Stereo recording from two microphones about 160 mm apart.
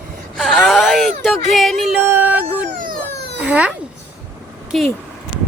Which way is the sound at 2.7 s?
60° right (ahead or behind).